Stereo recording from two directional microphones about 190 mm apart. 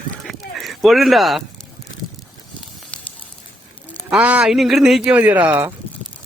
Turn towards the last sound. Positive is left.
turn(degrees=-10)  # may be behind; listen again after turning